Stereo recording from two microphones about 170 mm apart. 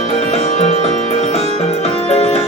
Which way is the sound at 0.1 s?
40° left (ahead or behind).